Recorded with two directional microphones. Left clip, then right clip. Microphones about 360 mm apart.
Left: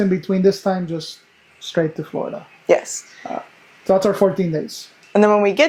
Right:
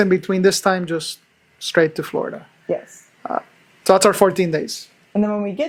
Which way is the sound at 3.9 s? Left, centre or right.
Right.